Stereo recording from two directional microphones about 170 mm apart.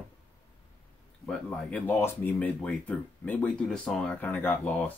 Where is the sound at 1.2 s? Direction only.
5° left (ahead or behind).